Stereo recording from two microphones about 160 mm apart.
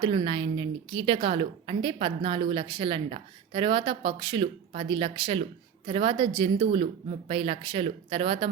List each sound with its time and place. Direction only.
0.0 s a woman's voice: 35° right (ahead or behind)